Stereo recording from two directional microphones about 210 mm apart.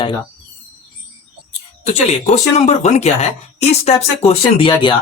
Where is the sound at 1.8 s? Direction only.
30° left (ahead or behind).